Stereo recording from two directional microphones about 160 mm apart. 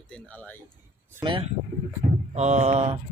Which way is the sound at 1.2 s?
35° right (ahead or behind).